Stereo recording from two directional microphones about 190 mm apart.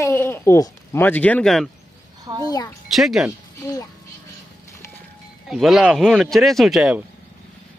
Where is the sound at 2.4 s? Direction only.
20° left (ahead or behind).